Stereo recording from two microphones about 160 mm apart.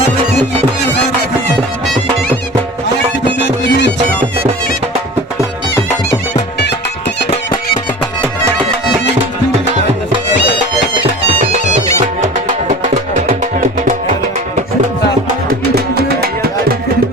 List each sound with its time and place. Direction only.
3.3 s music: 90° left
12.5 s music: 50° right (ahead or behind)
15.7 s music: 75° right (ahead or behind)